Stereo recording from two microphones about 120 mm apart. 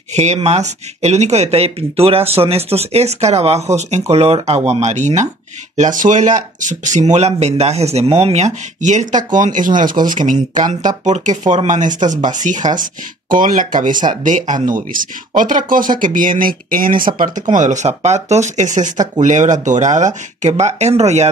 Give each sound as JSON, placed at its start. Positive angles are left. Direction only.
{"t": 0.1, "sound": "speech", "side_deg": -65}